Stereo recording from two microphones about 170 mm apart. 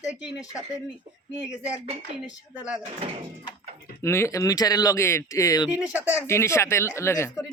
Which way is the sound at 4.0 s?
15° left (ahead or behind).